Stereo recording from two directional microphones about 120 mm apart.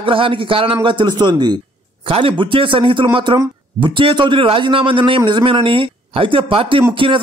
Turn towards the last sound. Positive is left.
turn(degrees=-45)  # may be behind; listen again after turning